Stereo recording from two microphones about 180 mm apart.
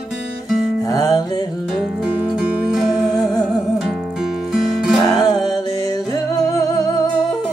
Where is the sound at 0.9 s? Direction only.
20° left (ahead or behind).